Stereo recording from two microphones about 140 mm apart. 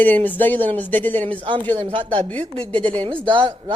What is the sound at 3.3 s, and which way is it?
Speech, 35° right (ahead or behind).